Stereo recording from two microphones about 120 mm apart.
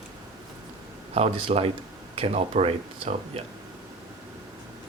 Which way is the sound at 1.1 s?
55° right (ahead or behind).